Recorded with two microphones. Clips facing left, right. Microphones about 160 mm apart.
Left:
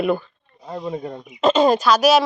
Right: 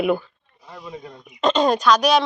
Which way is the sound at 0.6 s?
50° left (ahead or behind).